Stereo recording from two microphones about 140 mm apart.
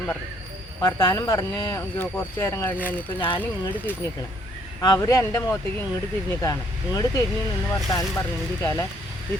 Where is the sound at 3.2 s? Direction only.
35° left (ahead or behind).